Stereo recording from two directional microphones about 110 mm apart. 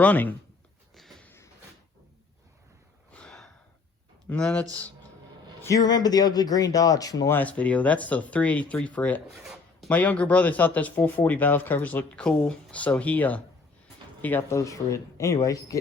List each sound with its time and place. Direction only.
0.0 s speech: 15° left (ahead or behind)
0.9 s a sound: centre (ahead or behind)
1.2 s a sound: 20° left (ahead or behind)
3.1 s snort: 10° left (ahead or behind)
4.3 s speech: 15° left (ahead or behind)
5.6 s speech: 35° left (ahead or behind)
7.3 s speech: 15° left (ahead or behind)
9.3 s a sound: centre (ahead or behind)
9.9 s speech: 15° left (ahead or behind); by 15.8 s 30° left (ahead or behind)